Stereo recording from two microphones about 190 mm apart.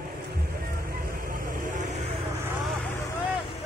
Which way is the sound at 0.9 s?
50° right (ahead or behind).